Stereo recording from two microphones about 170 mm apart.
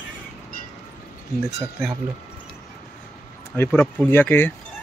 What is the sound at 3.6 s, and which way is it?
Speech, 10° left (ahead or behind).